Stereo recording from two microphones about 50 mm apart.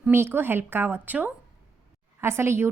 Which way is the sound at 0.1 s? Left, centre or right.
Right.